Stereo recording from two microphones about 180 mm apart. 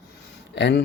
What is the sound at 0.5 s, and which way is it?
Speech, 75° left (ahead or behind).